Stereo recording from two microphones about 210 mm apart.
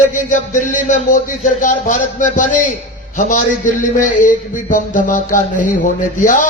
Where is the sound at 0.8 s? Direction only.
35° left (ahead or behind).